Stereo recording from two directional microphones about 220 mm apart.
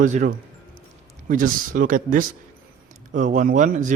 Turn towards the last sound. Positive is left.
turn(degrees=-35)  # may be behind; listen again after turning